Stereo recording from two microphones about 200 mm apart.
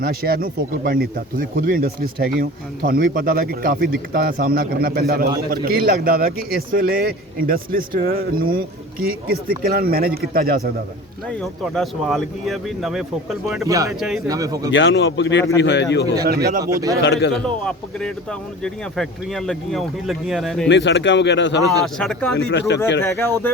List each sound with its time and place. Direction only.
0.0 s speech: 50° right (ahead or behind)
11.3 s speech: 5° left (ahead or behind)
13.7 s speech: 15° right (ahead or behind)
14.7 s speech: 65° left (ahead or behind)
16.6 s speech: 15° right (ahead or behind)
17.0 s speech: 60° left (ahead or behind)
17.4 s speech: 5° left (ahead or behind)
20.7 s speech: 60° left (ahead or behind)
21.9 s speech: 5° left (ahead or behind)
22.4 s speech: 55° left (ahead or behind)
23.0 s speech: 10° left (ahead or behind)